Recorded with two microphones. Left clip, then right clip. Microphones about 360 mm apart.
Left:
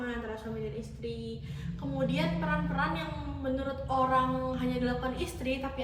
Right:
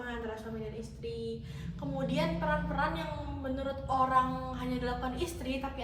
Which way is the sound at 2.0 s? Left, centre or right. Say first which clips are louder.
Left 1 dB; centre.